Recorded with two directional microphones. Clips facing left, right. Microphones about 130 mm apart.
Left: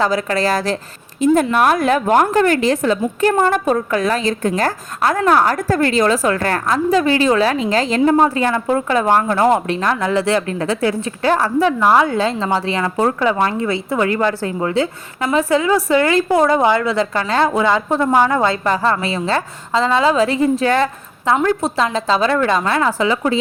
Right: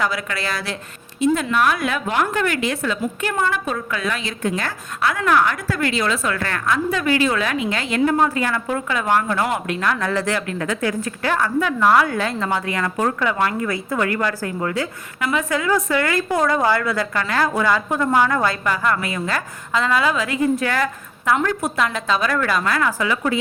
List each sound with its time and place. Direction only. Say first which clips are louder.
0.0 s a woman's voice: left 7 dB; 35° left (ahead or behind)
11.8 s a woman's voice: right 1 dB; 20° left (ahead or behind)